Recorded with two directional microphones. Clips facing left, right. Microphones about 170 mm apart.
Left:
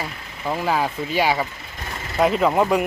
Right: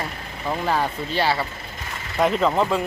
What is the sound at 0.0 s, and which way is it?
Speech, 5° left (ahead or behind).